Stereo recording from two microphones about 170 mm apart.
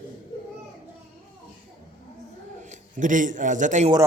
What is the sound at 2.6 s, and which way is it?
A man's voice, 45° right (ahead or behind).